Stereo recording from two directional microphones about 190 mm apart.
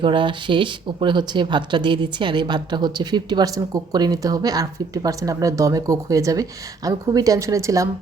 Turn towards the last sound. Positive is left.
turn(degrees=-15)  # may be behind; listen again after turning